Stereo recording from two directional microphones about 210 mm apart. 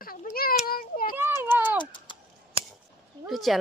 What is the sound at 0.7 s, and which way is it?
Child singing, 45° left (ahead or behind).